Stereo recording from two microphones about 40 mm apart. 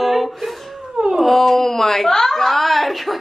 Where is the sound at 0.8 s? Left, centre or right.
Centre.